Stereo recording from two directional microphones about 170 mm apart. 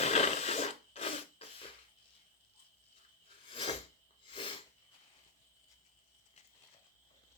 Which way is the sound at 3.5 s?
30° left (ahead or behind).